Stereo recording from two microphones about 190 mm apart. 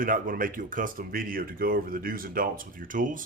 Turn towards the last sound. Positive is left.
turn(degrees=-45)  # may be behind; listen again after turning